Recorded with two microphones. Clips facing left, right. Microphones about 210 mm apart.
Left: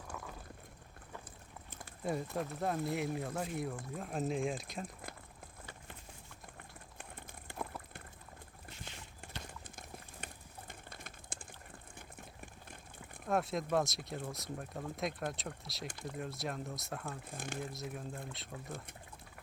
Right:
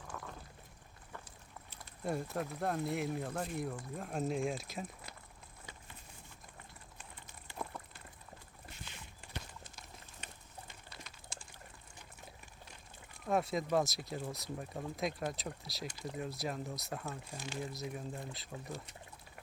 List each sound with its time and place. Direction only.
2.0 s speech: centre (ahead or behind)
7.0 s a sound: 55° left (ahead or behind)
8.8 s clip-clop: 50° left (ahead or behind)
10.7 s typing: 50° left (ahead or behind)
11.9 s a sound: 55° left (ahead or behind)
13.2 s speech: centre (ahead or behind)
17.2 s speech: 55° left (ahead or behind)
17.6 s speech: centre (ahead or behind)